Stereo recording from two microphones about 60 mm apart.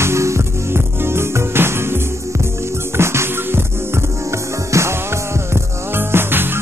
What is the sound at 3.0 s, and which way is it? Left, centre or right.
Music, right.